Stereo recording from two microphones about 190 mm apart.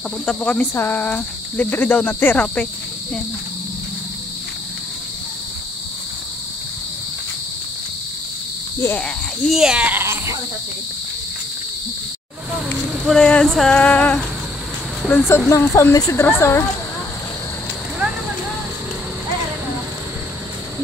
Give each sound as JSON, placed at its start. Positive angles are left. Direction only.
{"t": 0.2, "sound": "cricket", "side_deg": 5}
{"t": 8.7, "sound": "cricket", "side_deg": 10}
{"t": 9.5, "sound": "speech", "side_deg": -5}
{"t": 13.0, "sound": "a sound", "side_deg": 5}
{"t": 15.0, "sound": "cricket", "side_deg": 10}